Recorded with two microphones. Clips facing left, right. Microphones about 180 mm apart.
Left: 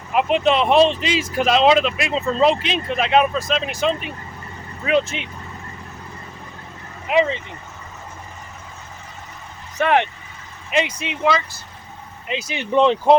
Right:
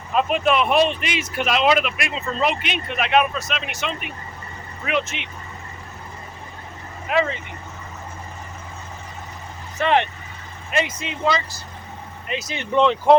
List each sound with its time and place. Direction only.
0.1 s speech: 20° left (ahead or behind)
7.1 s speech: 20° left (ahead or behind)
9.7 s speech: 15° left (ahead or behind)
12.3 s speech: 15° left (ahead or behind)